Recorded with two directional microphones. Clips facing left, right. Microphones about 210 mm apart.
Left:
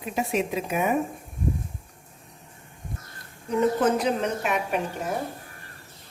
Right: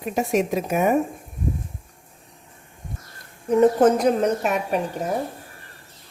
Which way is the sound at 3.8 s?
45° right (ahead or behind).